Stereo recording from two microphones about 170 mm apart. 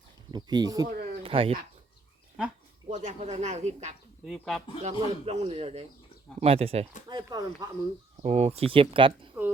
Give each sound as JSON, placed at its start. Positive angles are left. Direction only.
{"t": 0.3, "sound": "speech", "side_deg": -25}
{"t": 1.2, "sound": "speech", "side_deg": -35}
{"t": 2.9, "sound": "speech", "side_deg": -40}
{"t": 4.3, "sound": "speech", "side_deg": 0}
{"t": 4.8, "sound": "a man's voice", "side_deg": -40}
{"t": 7.1, "sound": "speech", "side_deg": -25}
{"t": 8.2, "sound": "a man's voice", "side_deg": -40}
{"t": 9.4, "sound": "speech", "side_deg": -10}